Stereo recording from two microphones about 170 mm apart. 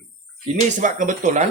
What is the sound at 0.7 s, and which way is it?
Speech, 50° right (ahead or behind).